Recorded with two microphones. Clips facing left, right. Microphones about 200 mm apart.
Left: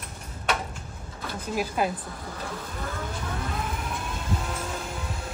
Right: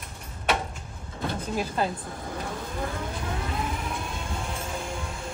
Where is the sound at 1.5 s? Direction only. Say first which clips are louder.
Left 2 dB; 10° left (ahead or behind).